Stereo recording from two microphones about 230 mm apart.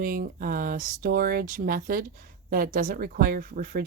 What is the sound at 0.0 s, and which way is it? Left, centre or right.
Speech, right.